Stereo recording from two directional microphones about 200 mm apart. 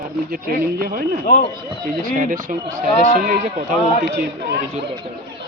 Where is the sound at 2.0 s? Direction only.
45° right (ahead or behind).